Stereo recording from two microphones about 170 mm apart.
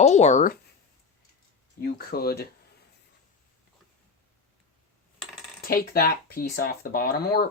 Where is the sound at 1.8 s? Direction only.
65° left (ahead or behind).